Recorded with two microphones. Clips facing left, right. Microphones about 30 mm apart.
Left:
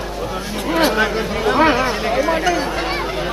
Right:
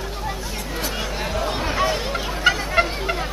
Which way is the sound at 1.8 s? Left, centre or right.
Left.